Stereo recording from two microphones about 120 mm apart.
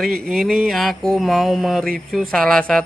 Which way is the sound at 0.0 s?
Centre (ahead or behind).